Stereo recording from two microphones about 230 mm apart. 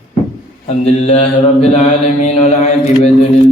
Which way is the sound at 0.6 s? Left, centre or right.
Left.